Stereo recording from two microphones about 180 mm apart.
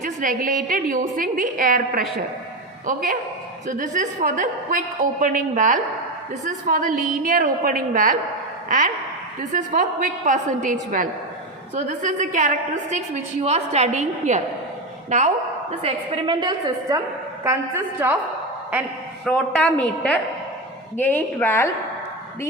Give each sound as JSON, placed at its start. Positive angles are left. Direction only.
{"t": 0.0, "sound": "a woman's voice", "side_deg": -50}
{"t": 15.8, "sound": "a woman's voice", "side_deg": -30}
{"t": 19.2, "sound": "a woman's voice", "side_deg": 5}